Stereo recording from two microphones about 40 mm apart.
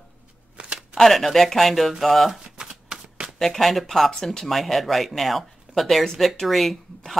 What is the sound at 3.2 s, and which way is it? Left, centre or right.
Speech, centre.